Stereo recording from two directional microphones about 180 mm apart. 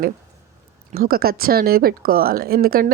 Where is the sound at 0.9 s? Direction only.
55° right (ahead or behind).